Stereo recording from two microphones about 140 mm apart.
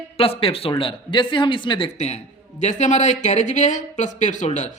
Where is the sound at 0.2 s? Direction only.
40° left (ahead or behind).